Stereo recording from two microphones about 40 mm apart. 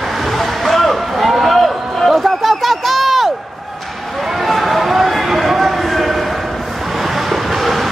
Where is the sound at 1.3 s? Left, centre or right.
Centre.